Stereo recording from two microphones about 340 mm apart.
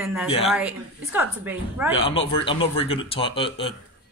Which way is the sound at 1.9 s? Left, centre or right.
Centre.